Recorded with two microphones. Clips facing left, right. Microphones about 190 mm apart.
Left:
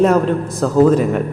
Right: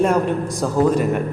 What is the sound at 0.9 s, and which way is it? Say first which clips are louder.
Speech: left 2 dB; centre (ahead or behind).